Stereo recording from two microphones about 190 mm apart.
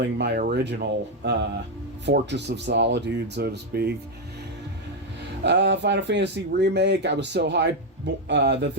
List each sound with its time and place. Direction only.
0.2 s speech: 55° right (ahead or behind)
5.4 s speech: 65° right (ahead or behind)